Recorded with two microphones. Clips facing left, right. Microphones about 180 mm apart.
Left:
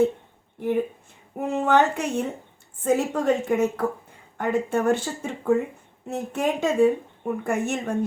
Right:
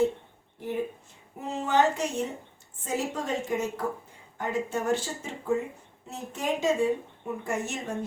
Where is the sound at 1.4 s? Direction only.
55° left (ahead or behind).